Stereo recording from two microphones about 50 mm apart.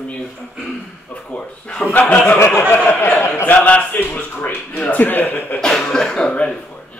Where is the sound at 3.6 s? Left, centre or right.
Left.